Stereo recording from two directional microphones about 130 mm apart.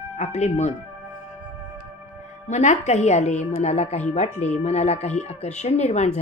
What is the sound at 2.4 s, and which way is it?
Speech, 65° left (ahead or behind).